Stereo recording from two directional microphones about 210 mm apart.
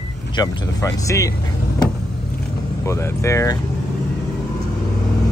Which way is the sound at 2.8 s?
15° left (ahead or behind).